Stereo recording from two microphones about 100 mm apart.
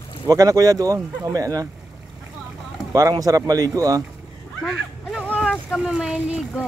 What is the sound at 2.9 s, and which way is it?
Speech, 35° right (ahead or behind).